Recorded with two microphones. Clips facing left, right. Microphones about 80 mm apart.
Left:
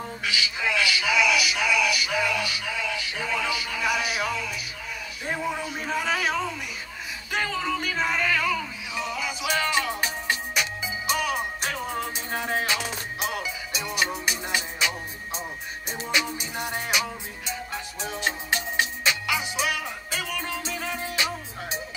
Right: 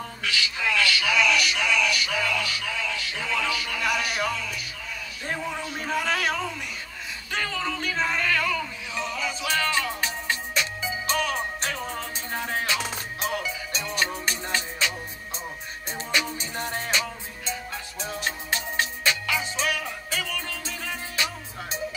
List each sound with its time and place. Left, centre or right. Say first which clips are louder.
0.0 s music: even; centre
5.2 s a man's voice: left 2 dB; centre
7.2 s music: left 2 dB; centre
15.9 s music: left 1 dB; centre